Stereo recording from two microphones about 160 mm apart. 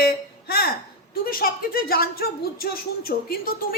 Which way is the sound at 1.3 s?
65° left (ahead or behind).